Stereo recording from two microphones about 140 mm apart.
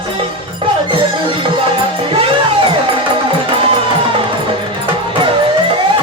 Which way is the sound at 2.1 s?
40° right (ahead or behind).